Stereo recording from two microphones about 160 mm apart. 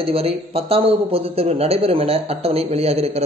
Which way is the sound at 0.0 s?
35° right (ahead or behind).